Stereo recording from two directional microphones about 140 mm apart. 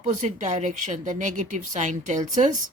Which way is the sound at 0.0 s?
60° right (ahead or behind).